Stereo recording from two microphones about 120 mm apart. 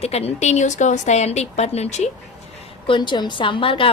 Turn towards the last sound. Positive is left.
turn(degrees=45)  # may be behind; listen again after turning